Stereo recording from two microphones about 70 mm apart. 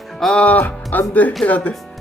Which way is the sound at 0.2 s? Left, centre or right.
Centre.